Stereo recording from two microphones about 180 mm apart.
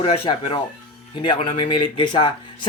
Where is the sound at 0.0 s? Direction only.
30° left (ahead or behind).